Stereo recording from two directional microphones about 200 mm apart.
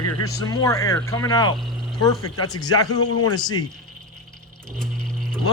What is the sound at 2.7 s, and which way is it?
Speech, 90° left.